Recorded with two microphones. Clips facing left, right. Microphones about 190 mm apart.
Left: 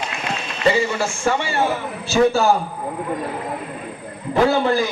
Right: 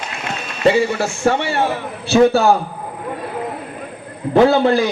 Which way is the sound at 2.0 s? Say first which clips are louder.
Right 4 dB; 60° right (ahead or behind).